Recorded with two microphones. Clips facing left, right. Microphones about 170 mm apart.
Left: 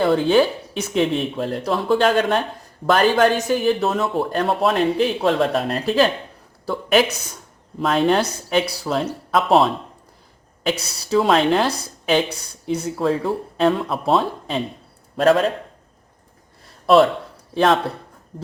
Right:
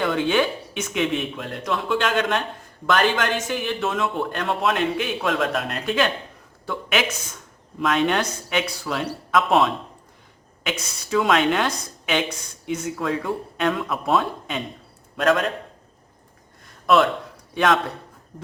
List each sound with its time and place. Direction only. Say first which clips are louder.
0.0 s a man's voice: left 5 dB; 35° left (ahead or behind)
16.8 s a man's voice: left 4 dB; 35° left (ahead or behind)